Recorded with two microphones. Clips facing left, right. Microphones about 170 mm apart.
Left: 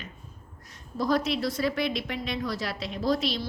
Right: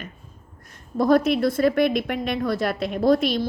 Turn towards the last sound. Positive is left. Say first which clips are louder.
# right 8 dB
turn(degrees=-50)  # may be behind; listen again after turning